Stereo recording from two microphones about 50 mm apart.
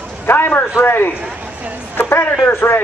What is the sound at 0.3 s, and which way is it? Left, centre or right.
Speech, left.